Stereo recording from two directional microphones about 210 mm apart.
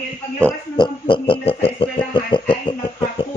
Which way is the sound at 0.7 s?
25° left (ahead or behind).